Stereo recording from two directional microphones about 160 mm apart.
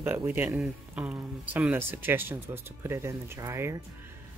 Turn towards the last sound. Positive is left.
turn(degrees=-15)  # may be behind; listen again after turning